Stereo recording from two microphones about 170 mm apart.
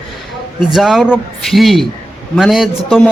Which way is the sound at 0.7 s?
Centre (ahead or behind).